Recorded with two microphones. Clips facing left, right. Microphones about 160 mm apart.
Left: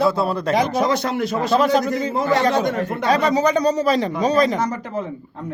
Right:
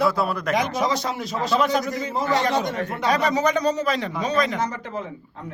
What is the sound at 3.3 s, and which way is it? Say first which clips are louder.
A man's voice: left 4 dB; 35° left (ahead or behind).